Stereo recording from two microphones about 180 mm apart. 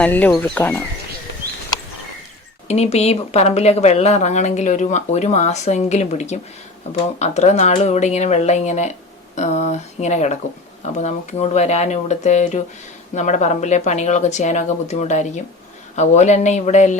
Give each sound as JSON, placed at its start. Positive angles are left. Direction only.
{"t": 0.0, "sound": "speech", "side_deg": 10}
{"t": 2.6, "sound": "speech", "side_deg": 35}
{"t": 9.3, "sound": "a sound", "side_deg": 40}
{"t": 10.8, "sound": "speech", "side_deg": 40}